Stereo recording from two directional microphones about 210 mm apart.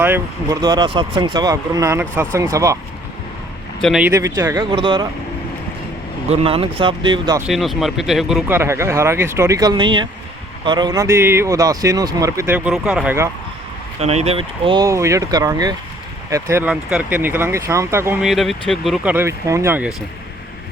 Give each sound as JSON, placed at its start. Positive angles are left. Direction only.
{"t": 0.0, "sound": "speech", "side_deg": -15}
{"t": 3.8, "sound": "speech", "side_deg": 0}
{"t": 4.0, "sound": "speech", "side_deg": -15}
{"t": 6.3, "sound": "speech", "side_deg": -25}
{"t": 7.4, "sound": "speech", "side_deg": 0}
{"t": 14.0, "sound": "speech", "side_deg": -30}
{"t": 19.1, "sound": "speech", "side_deg": -15}